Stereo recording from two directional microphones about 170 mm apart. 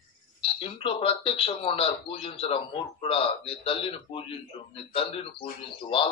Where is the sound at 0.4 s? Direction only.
35° left (ahead or behind).